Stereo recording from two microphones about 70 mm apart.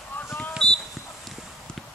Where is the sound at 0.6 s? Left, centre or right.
Centre.